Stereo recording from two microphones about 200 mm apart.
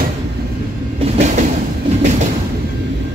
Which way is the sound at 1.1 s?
35° right (ahead or behind).